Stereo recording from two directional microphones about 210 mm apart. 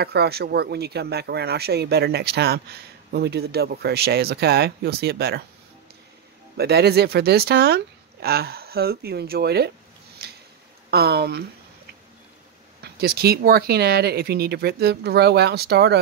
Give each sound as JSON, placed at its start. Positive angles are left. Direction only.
{"t": 0.0, "sound": "speech", "side_deg": -50}
{"t": 6.5, "sound": "speech", "side_deg": -50}
{"t": 10.2, "sound": "a sound", "side_deg": -50}
{"t": 10.9, "sound": "speech", "side_deg": -50}
{"t": 12.8, "sound": "speech", "side_deg": -50}